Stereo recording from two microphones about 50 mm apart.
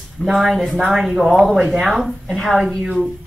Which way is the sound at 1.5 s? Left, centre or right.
Right.